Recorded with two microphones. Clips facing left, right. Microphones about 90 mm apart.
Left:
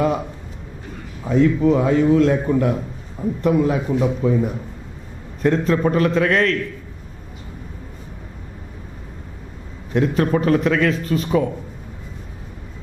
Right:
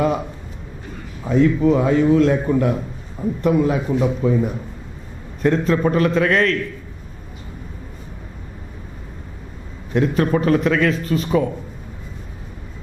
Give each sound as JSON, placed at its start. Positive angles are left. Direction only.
{"t": 1.2, "sound": "a man's voice", "side_deg": -20}
{"t": 9.9, "sound": "a man's voice", "side_deg": -20}